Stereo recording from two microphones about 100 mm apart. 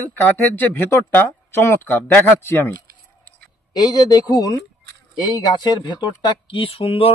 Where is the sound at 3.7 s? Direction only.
40° left (ahead or behind); by 7.1 s 70° left (ahead or behind).